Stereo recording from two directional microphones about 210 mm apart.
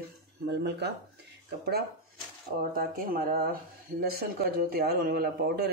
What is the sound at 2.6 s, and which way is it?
Speech, 45° right (ahead or behind).